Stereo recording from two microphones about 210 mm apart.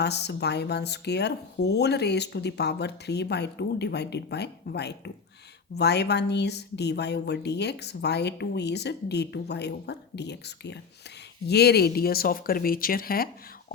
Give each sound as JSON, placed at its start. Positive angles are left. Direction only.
{"t": 0.0, "sound": "speech", "side_deg": 50}